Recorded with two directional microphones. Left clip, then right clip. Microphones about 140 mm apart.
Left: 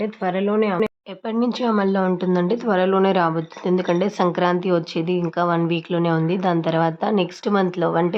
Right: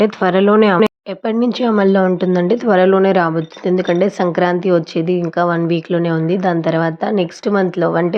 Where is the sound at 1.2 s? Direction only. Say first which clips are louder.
Right 6 dB; 35° right (ahead or behind).